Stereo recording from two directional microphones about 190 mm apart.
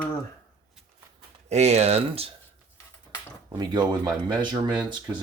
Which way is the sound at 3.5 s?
25° right (ahead or behind).